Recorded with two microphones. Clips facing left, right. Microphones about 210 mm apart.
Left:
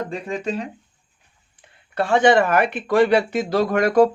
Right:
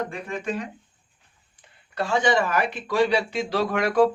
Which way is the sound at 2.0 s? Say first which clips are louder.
Left 6 dB; 60° left (ahead or behind).